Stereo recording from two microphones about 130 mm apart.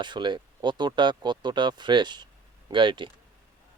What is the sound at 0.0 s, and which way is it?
Speech, 35° right (ahead or behind).